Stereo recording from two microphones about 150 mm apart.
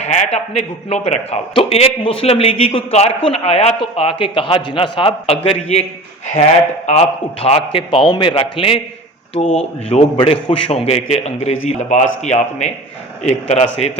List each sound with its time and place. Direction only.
0.0 s a sound: 50° left (ahead or behind)
0.9 s a man's voice: 45° left (ahead or behind)
9.4 s a man's voice: 50° left (ahead or behind)
10.2 s a man's voice: 35° left (ahead or behind)